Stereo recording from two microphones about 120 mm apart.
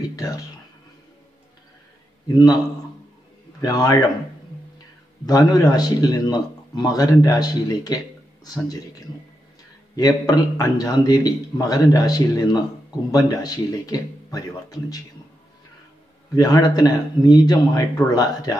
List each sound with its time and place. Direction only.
0.1 s speech: 30° left (ahead or behind)
2.3 s a man's voice: 30° left (ahead or behind)
3.6 s a man's voice: 30° left (ahead or behind)
5.2 s a man's voice: 30° left (ahead or behind)
9.9 s a man's voice: 30° left (ahead or behind)
16.3 s a man's voice: 30° left (ahead or behind)